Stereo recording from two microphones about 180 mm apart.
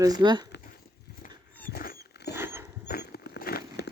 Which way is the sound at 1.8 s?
55° left (ahead or behind).